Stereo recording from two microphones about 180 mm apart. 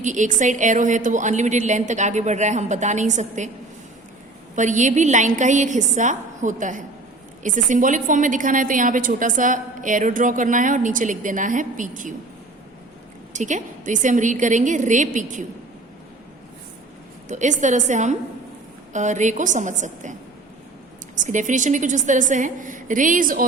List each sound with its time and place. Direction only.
0.0 s a woman's voice: 45° right (ahead or behind)
4.5 s a woman's voice: 45° right (ahead or behind)
13.3 s a woman's voice: 45° right (ahead or behind)
17.2 s a woman's voice: 40° right (ahead or behind)
21.2 s a woman's voice: 45° right (ahead or behind)